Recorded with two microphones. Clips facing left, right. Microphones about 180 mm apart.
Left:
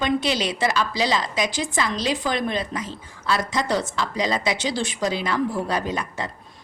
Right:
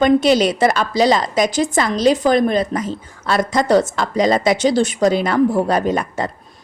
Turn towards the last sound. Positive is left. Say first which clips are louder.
# right 8 dB
turn(degrees=-45)  # may be behind; listen again after turning